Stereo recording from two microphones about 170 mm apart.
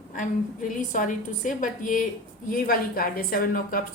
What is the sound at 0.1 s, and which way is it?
A woman's voice, 50° left (ahead or behind).